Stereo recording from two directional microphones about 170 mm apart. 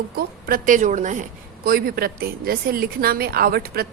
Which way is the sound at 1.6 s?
60° right (ahead or behind).